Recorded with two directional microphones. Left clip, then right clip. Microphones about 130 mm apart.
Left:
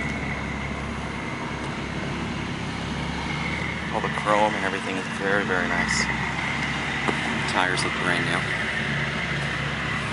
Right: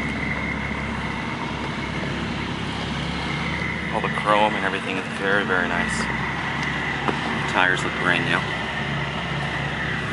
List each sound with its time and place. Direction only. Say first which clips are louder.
4.3 s speech: right 2 dB; 10° left (ahead or behind)
7.1 s speech: right 1 dB; 20° left (ahead or behind)